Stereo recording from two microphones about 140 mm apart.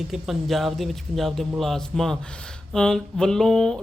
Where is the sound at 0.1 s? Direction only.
Centre (ahead or behind).